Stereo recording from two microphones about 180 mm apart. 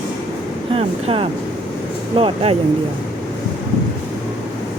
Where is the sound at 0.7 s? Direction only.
35° right (ahead or behind).